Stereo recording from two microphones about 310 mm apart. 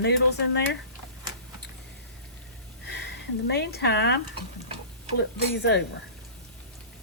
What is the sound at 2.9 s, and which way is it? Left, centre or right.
Speech, left.